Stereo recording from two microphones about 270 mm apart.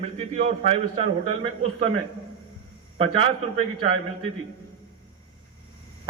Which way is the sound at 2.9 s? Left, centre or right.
Right.